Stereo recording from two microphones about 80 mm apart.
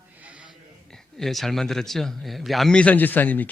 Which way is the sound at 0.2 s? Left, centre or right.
Centre.